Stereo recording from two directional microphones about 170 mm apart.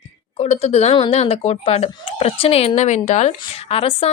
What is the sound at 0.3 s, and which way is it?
Speech, 40° left (ahead or behind).